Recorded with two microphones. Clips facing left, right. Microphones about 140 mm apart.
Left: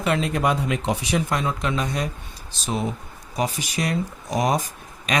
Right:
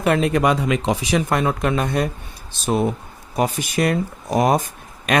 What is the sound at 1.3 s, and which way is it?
Speech, 55° right (ahead or behind).